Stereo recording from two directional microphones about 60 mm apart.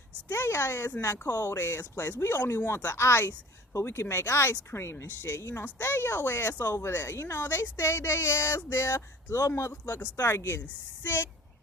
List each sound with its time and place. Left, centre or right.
0.3 s speech: left
11.0 s speech: left